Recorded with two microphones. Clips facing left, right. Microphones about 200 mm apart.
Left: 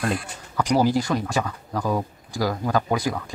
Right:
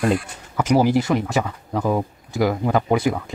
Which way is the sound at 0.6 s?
20° right (ahead or behind).